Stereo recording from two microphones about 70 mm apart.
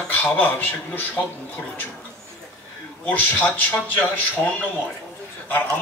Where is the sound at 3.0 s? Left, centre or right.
Left.